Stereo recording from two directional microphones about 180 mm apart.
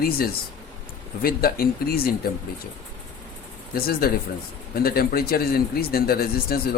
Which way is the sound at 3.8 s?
55° left (ahead or behind).